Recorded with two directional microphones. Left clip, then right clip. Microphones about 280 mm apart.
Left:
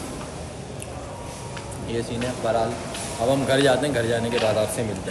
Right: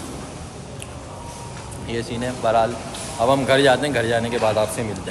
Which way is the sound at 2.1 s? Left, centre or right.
Centre.